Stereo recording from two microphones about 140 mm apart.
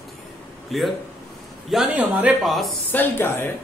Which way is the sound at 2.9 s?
15° left (ahead or behind).